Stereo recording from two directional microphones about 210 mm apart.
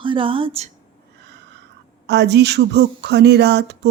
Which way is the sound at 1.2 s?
55° right (ahead or behind).